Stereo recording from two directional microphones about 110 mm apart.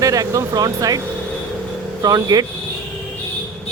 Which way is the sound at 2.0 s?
35° right (ahead or behind).